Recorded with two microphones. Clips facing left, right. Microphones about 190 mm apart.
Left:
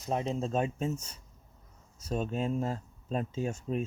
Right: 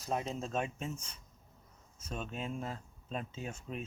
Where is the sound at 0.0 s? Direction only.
25° left (ahead or behind).